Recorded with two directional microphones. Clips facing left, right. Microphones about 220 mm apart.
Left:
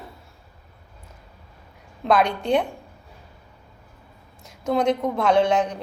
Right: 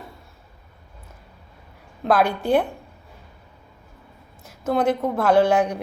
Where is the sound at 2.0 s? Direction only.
5° right (ahead or behind).